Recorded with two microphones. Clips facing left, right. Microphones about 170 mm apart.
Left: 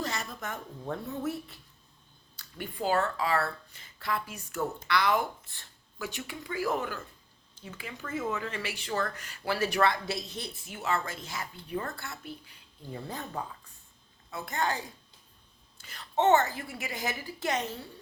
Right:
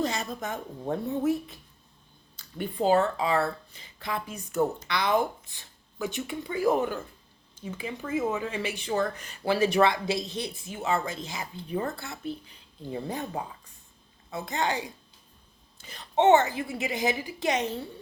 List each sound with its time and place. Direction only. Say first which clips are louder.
0.0 s a woman's voice: right 6 dB; 20° right (ahead or behind)
2.6 s speech: right 6 dB; 25° right (ahead or behind)
8.2 s speech: right 3 dB; 25° right (ahead or behind)